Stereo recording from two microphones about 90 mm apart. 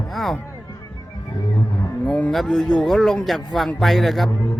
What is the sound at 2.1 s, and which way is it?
Speech, 15° left (ahead or behind).